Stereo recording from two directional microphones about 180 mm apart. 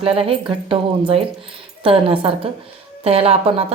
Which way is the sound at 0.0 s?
30° right (ahead or behind).